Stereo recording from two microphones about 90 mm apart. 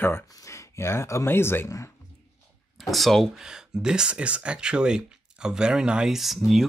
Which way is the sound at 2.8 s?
Centre (ahead or behind).